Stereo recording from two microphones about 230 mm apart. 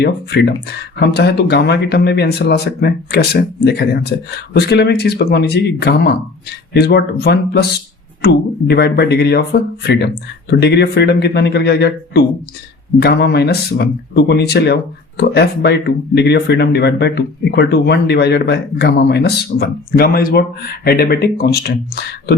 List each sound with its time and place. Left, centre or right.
0.0 s speech: left